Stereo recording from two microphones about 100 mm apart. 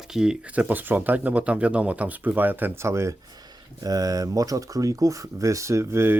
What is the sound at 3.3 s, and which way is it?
Speech, 40° right (ahead or behind).